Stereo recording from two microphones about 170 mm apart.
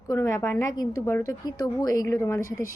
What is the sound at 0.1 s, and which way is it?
A woman's voice, 15° left (ahead or behind).